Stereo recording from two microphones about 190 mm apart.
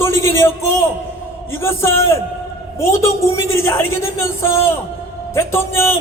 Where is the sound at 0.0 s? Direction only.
15° left (ahead or behind).